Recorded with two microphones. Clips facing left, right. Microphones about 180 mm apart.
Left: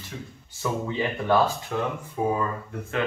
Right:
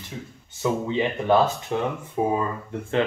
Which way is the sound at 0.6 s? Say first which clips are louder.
Right 4 dB; 20° right (ahead or behind).